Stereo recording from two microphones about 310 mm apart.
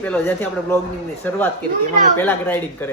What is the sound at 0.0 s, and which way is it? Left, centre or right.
Speech, centre.